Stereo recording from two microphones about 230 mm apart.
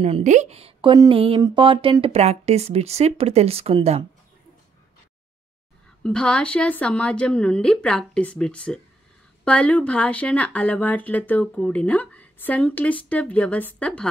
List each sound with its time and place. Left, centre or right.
0.0 s a woman's voice: right
6.0 s speech: centre